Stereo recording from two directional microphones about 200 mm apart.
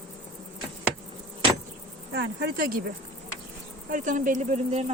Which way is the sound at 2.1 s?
50° right (ahead or behind).